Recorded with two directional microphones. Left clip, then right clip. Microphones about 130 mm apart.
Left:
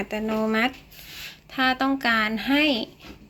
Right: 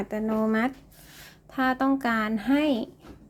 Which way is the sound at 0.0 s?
30° right (ahead or behind).